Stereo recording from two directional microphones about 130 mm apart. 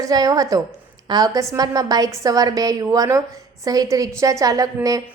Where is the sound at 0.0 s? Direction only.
30° right (ahead or behind).